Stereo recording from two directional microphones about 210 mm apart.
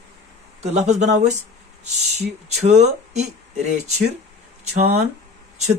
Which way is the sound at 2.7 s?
30° right (ahead or behind).